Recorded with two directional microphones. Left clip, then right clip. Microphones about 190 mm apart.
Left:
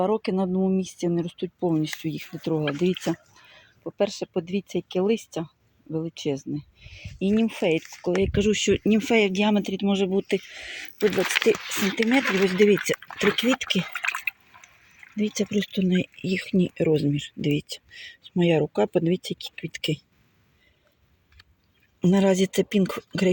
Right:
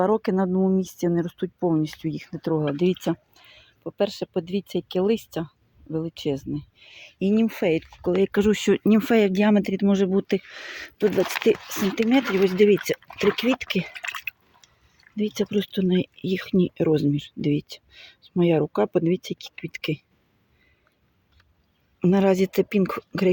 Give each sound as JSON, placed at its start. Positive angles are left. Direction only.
{"t": 0.0, "sound": "speech", "side_deg": -20}
{"t": 6.5, "sound": "a sound", "side_deg": -10}
{"t": 7.4, "sound": "speech", "side_deg": -15}
{"t": 11.0, "sound": "speech", "side_deg": -30}
{"t": 11.4, "sound": "speech", "side_deg": -15}
{"t": 22.0, "sound": "speech", "side_deg": -5}